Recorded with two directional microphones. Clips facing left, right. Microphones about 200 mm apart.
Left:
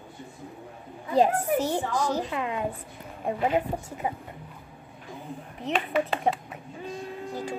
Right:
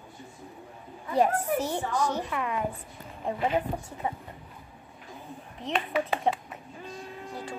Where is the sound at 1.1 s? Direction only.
30° left (ahead or behind).